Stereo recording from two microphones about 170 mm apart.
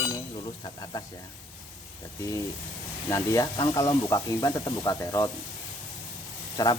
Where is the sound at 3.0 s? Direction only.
20° left (ahead or behind).